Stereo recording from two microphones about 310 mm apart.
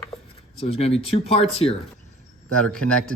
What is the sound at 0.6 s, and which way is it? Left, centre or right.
Speech, centre.